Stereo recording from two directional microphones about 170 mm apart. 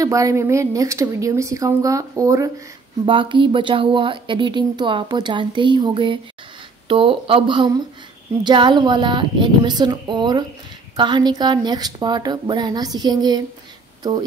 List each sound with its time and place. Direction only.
0.0 s speech: 20° right (ahead or behind)
3.1 s speech: 30° right (ahead or behind)